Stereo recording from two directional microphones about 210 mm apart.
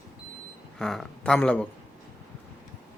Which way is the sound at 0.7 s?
Centre (ahead or behind).